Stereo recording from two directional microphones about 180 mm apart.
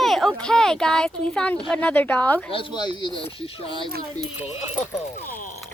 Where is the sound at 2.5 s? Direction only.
30° left (ahead or behind).